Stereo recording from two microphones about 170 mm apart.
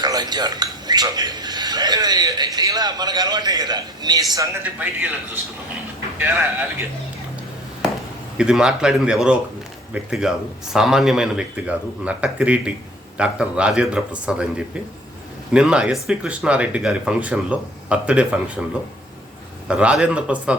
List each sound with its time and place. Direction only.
0.0 s speech: 25° right (ahead or behind)
8.4 s a man's voice: 5° right (ahead or behind)
19.6 s speech: 5° right (ahead or behind)